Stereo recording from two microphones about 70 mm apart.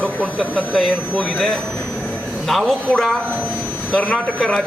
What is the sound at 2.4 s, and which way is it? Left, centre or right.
Speech, centre.